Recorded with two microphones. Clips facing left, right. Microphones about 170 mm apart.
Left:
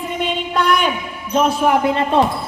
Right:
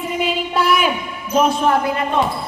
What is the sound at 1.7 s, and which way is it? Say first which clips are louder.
Speech: left 2 dB; 25° left (ahead or behind).